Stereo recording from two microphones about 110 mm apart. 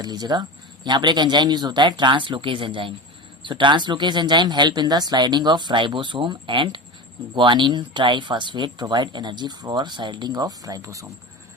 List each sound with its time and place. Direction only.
0.0 s speech: 40° right (ahead or behind)